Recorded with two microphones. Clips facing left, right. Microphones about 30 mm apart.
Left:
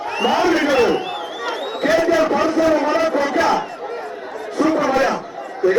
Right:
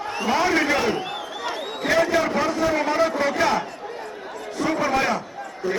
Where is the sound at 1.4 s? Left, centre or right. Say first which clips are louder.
Left 6 dB; left.